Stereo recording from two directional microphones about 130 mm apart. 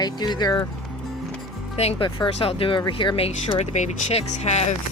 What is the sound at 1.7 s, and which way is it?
Speech, 50° left (ahead or behind).